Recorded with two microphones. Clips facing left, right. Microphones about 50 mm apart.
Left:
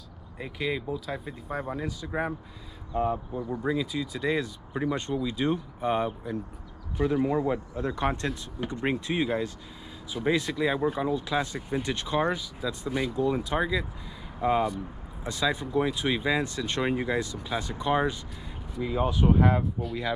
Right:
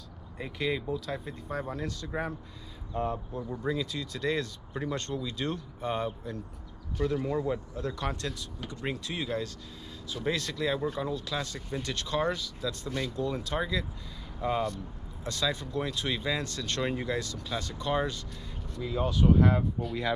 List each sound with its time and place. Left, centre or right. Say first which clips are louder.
0.4 s speech: left 1 dB; centre
19.8 s speech: left 1 dB; centre